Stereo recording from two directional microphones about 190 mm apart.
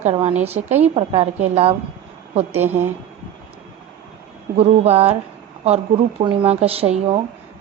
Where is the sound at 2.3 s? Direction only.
35° right (ahead or behind).